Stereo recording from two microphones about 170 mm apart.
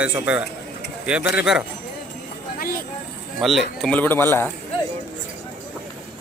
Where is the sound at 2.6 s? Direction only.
60° left (ahead or behind).